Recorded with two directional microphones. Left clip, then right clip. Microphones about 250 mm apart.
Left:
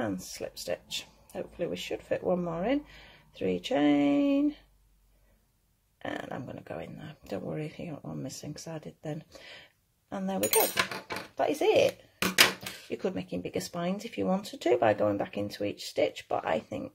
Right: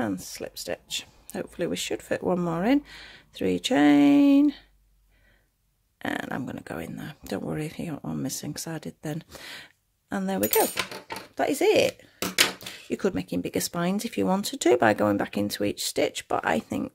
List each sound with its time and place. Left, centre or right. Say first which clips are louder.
0.0 s speech: right 3 dB; right
5.9 s speech: right 6 dB; right
12.9 s speech: right 6 dB; right